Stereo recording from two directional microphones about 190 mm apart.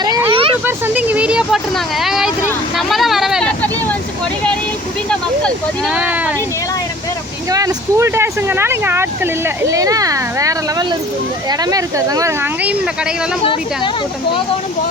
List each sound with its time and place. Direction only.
0.0 s a sound: 20° right (ahead or behind)
0.6 s speech: 10° right (ahead or behind)
2.7 s vehicle: centre (ahead or behind)
5.0 s speech: centre (ahead or behind)
7.5 s speech: 20° right (ahead or behind)
13.4 s speech: 25° left (ahead or behind)